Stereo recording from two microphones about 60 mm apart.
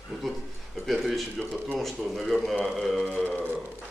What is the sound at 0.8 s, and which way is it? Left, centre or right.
Speech, centre.